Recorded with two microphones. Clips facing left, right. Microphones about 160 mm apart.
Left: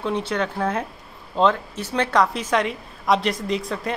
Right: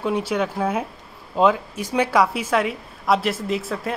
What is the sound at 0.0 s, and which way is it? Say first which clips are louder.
A woman's voice: right 2 dB; 10° right (ahead or behind).